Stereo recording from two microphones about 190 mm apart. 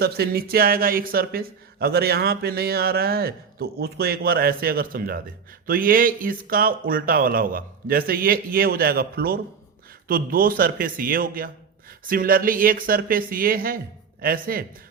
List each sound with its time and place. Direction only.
0.0 s speech: 55° right (ahead or behind)